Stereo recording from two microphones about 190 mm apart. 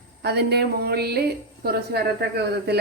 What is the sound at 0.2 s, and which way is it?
A woman's voice, 60° right (ahead or behind).